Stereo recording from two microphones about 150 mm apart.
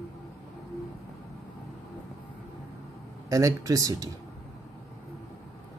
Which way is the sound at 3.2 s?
20° right (ahead or behind).